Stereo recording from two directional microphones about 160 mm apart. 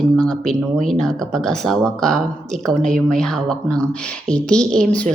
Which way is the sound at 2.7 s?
50° right (ahead or behind).